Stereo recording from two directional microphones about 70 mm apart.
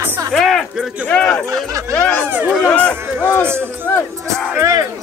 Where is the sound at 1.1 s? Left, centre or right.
Centre.